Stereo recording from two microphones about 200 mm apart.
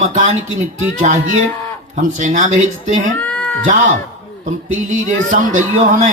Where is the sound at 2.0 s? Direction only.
40° right (ahead or behind).